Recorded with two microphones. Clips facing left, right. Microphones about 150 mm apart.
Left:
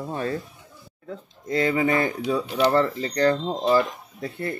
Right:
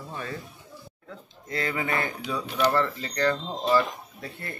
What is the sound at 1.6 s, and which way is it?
Speech, 25° left (ahead or behind).